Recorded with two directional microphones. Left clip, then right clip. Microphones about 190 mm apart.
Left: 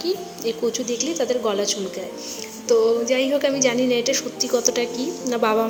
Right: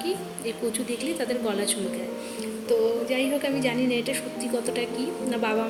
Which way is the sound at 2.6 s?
Centre (ahead or behind).